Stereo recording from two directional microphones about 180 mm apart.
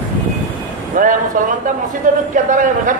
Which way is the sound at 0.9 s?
50° right (ahead or behind).